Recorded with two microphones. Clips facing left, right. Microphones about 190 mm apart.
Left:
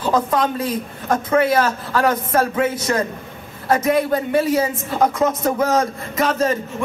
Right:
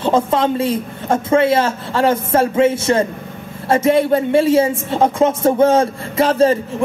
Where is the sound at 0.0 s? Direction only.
25° right (ahead or behind).